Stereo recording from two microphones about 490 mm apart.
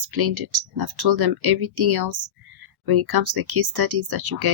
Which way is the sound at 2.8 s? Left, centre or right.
Right.